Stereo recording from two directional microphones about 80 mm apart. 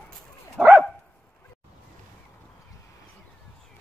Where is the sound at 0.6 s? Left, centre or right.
Centre.